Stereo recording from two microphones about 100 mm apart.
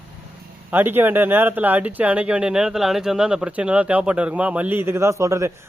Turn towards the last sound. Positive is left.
turn(degrees=-30)  # may be behind; listen again after turning